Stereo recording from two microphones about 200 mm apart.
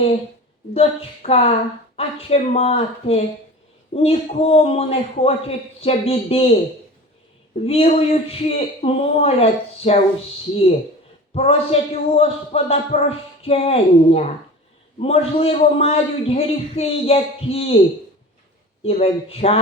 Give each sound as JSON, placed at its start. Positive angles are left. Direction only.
{"t": 0.7, "sound": "speech", "side_deg": 30}
{"t": 7.6, "sound": "speech", "side_deg": 30}
{"t": 11.3, "sound": "speech", "side_deg": 30}
{"t": 18.8, "sound": "speech", "side_deg": 30}